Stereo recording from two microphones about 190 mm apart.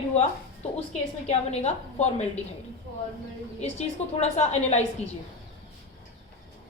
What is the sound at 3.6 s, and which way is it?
Speech, 35° left (ahead or behind).